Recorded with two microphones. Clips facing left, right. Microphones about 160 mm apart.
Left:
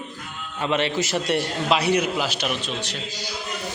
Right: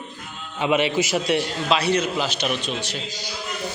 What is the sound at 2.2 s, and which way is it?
Speech, 5° left (ahead or behind).